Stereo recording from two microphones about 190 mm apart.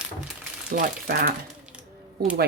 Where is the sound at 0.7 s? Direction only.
45° right (ahead or behind).